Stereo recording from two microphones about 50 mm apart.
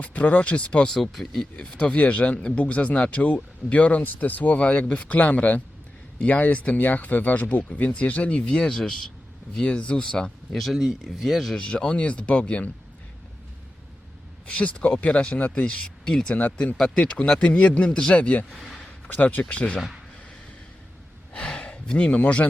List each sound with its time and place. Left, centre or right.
0.0 s speech: left
0.9 s speech: centre
1.8 s speech: left
8.4 s speech: centre
9.6 s speech: left
10.5 s speech: centre
11.5 s speech: centre
14.4 s speech: left
15.6 s speech: centre
21.3 s a sound: left